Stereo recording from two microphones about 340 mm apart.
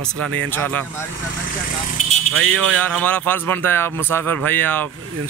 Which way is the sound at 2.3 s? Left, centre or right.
Right.